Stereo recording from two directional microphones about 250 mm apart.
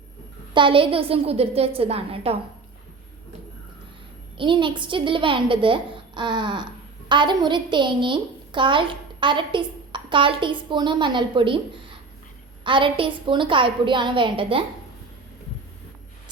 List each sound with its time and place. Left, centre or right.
0.5 s a woman's voice: centre
4.4 s a woman's voice: centre